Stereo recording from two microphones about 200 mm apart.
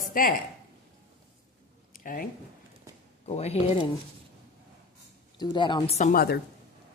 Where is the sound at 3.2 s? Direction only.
30° left (ahead or behind).